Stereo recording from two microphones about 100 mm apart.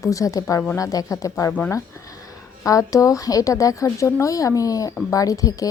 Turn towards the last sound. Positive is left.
turn(degrees=35)  # may be behind; listen again after turning